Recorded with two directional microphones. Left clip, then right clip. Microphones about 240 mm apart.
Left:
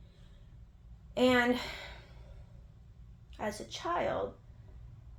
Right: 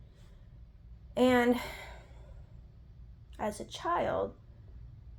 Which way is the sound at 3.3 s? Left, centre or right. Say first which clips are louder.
Right 1 dB; right.